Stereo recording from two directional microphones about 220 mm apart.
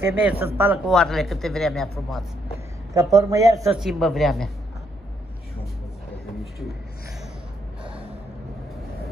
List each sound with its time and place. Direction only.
0.0 s speech: 10° right (ahead or behind)
0.9 s a man's voice: centre (ahead or behind)
2.9 s speech: 15° right (ahead or behind)
3.7 s a man's voice: centre (ahead or behind)